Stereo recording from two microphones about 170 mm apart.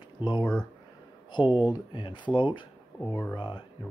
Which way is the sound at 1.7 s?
25° left (ahead or behind).